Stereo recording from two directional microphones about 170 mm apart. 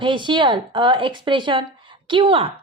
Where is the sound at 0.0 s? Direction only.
30° right (ahead or behind).